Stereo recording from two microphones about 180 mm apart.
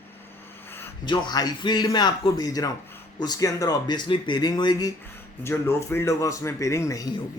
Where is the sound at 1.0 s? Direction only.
25° left (ahead or behind).